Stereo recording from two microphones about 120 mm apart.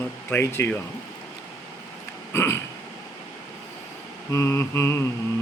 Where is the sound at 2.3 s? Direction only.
20° left (ahead or behind).